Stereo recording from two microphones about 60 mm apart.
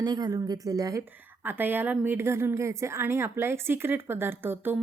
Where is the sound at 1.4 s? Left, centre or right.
Right.